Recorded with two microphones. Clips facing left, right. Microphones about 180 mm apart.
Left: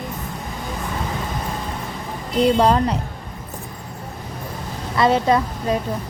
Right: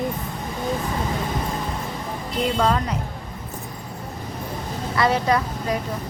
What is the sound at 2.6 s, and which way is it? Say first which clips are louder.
Speech: left 5 dB; 35° left (ahead or behind).